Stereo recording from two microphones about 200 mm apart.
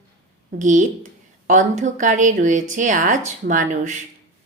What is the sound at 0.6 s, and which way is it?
A woman's voice, 40° right (ahead or behind).